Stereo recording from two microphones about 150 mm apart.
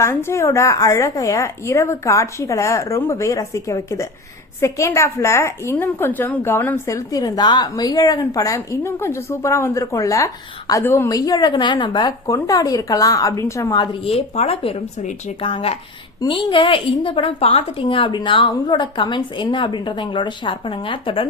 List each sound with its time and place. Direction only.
0.0 s a woman's voice: 15° left (ahead or behind)
14.0 s a woman's voice: 40° left (ahead or behind)